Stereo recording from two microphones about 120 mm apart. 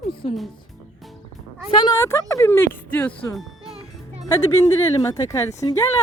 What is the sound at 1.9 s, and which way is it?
Speech, 20° left (ahead or behind).